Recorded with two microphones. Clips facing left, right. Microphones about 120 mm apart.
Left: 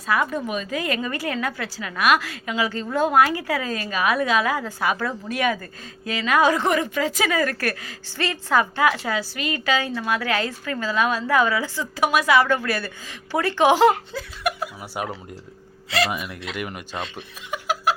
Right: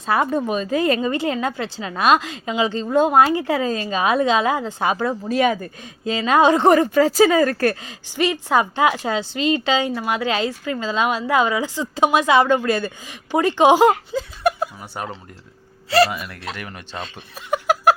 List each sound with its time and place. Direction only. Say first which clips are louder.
0.0 s a woman's voice: right 4 dB; 30° right (ahead or behind)
14.8 s speech: left 1 dB; 5° left (ahead or behind)
16.0 s speech: even; 20° left (ahead or behind)
17.5 s chuckle: right 7 dB; 45° right (ahead or behind)